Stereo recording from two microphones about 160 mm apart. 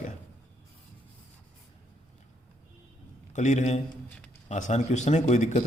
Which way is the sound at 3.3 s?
50° left (ahead or behind).